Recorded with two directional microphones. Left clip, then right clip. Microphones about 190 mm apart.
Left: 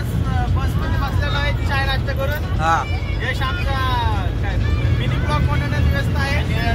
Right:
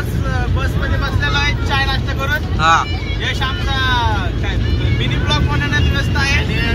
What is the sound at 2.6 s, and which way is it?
Vehicle, 15° right (ahead or behind).